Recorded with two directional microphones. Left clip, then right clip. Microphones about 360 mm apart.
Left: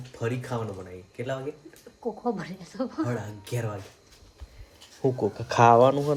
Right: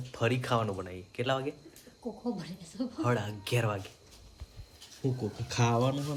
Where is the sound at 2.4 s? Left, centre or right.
Centre.